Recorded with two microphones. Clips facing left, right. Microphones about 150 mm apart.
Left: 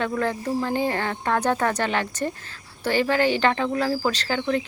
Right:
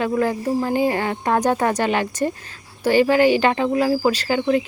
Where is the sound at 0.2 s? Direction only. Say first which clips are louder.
Right 4 dB; 10° right (ahead or behind).